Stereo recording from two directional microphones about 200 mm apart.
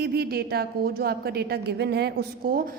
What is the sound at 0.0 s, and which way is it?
A woman's voice, 50° right (ahead or behind).